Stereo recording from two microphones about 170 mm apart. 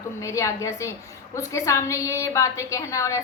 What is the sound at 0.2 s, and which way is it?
A woman's voice, 15° left (ahead or behind).